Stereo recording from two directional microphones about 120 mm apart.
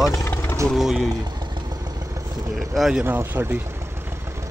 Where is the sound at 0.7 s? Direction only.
Centre (ahead or behind).